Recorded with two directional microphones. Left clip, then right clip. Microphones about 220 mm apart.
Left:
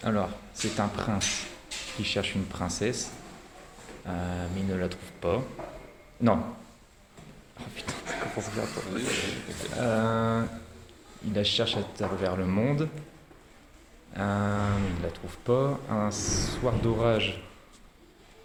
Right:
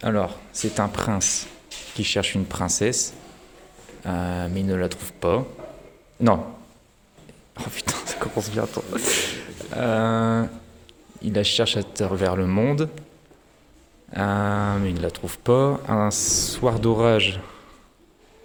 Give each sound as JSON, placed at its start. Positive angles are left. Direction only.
{"t": 0.0, "sound": "speech", "side_deg": -40}
{"t": 7.5, "sound": "speech", "side_deg": -45}
{"t": 14.1, "sound": "speech", "side_deg": -50}